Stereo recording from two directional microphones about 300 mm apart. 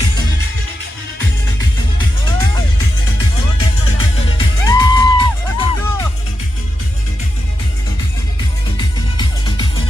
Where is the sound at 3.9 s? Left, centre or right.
Centre.